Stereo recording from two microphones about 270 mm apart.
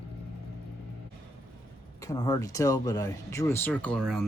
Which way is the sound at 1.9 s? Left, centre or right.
Centre.